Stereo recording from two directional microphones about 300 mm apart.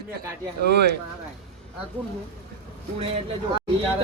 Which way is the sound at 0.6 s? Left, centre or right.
Right.